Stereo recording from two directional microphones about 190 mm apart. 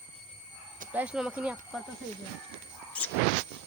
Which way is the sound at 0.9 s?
5° right (ahead or behind).